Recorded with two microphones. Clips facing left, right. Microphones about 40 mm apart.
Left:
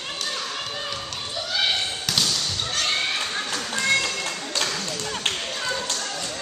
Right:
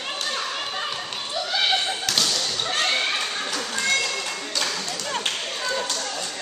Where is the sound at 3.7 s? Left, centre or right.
Centre.